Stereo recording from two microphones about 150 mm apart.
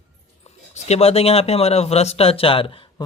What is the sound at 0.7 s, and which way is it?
Speech, 45° left (ahead or behind).